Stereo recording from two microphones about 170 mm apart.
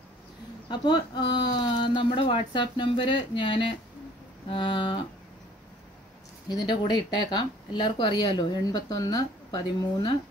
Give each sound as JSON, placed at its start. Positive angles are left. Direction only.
{"t": 0.7, "sound": "speech", "side_deg": 25}
{"t": 6.5, "sound": "speech", "side_deg": 25}